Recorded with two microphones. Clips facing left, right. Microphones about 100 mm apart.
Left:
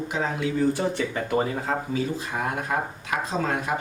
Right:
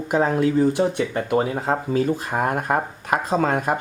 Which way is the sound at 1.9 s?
50° right (ahead or behind).